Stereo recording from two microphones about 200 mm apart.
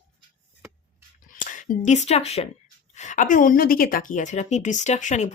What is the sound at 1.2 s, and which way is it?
A woman's voice, 40° left (ahead or behind).